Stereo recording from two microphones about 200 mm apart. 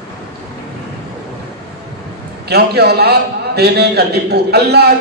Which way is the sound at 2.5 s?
55° right (ahead or behind).